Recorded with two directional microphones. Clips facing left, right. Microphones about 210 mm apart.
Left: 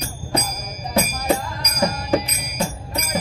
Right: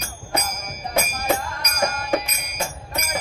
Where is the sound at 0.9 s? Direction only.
35° left (ahead or behind).